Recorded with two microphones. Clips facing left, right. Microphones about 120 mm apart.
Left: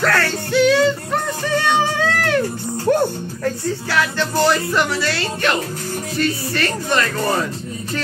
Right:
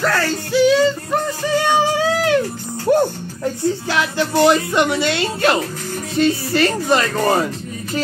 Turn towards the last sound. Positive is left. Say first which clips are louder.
# right 3 dB
turn(degrees=-25)  # may be behind; listen again after turning